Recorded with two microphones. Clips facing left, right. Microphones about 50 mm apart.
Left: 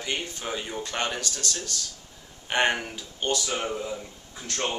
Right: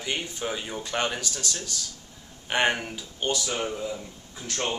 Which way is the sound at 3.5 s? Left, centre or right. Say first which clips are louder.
Even; centre.